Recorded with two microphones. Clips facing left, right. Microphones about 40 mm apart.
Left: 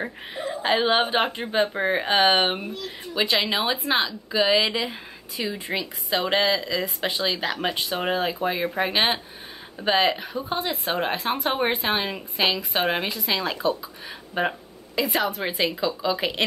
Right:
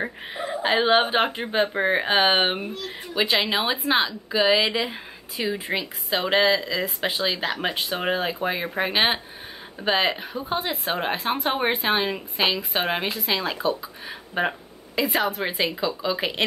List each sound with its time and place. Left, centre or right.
0.0 s a woman's voice: centre
6.0 s a woman's voice: centre